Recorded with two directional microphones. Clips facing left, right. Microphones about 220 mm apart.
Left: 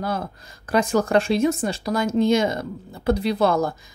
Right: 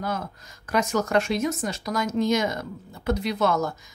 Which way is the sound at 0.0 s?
30° left (ahead or behind).